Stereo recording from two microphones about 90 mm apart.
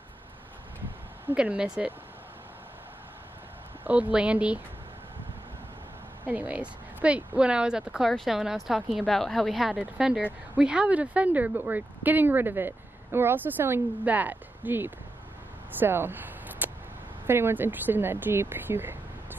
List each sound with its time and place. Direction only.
1.3 s speech: 10° right (ahead or behind)
3.8 s speech: 15° right (ahead or behind)
6.2 s a woman's voice: 15° right (ahead or behind)
15.8 s a sound: 25° right (ahead or behind)
17.3 s speech: 25° right (ahead or behind)